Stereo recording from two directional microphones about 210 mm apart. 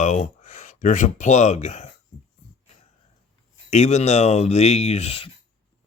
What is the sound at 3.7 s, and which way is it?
Speech, 35° left (ahead or behind).